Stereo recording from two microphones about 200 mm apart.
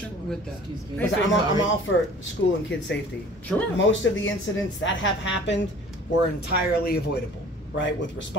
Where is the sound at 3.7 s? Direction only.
70° left (ahead or behind).